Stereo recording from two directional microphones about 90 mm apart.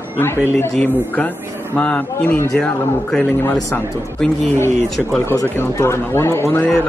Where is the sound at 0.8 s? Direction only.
20° left (ahead or behind).